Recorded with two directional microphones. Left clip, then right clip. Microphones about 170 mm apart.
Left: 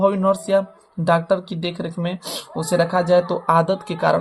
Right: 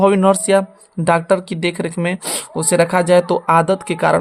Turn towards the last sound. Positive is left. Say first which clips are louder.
# right 4 dB
turn(degrees=-40)  # may be behind; listen again after turning